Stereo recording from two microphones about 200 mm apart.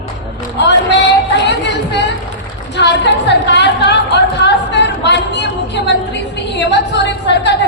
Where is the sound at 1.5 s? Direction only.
60° left (ahead or behind).